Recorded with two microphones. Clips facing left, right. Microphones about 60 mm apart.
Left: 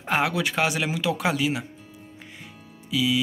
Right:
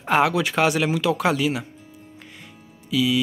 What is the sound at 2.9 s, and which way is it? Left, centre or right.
Music, centre.